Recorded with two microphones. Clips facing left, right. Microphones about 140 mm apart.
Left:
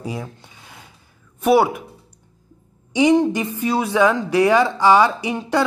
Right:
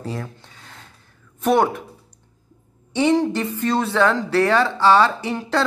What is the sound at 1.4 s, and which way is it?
Speech, 10° left (ahead or behind).